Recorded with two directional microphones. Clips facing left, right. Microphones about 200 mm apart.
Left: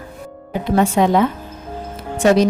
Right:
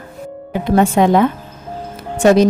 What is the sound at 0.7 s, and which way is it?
Speech, 55° right (ahead or behind).